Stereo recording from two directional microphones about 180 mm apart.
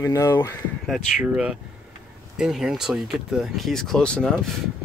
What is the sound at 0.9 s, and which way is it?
Speech, 5° right (ahead or behind).